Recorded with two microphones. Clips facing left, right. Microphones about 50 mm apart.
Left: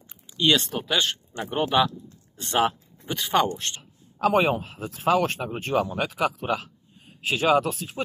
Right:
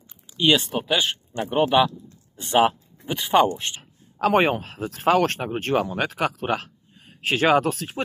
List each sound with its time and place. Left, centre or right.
0.4 s speech: centre
4.2 s speech: right